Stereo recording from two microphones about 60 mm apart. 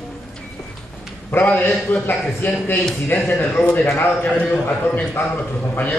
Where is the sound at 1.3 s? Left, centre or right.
Left.